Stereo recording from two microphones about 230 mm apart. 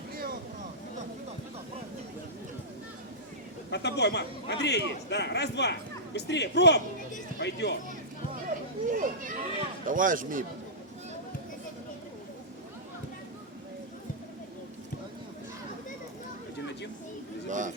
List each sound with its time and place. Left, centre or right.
3.7 s a man's voice: left
8.9 s a man's voice: right
17.5 s a sound: right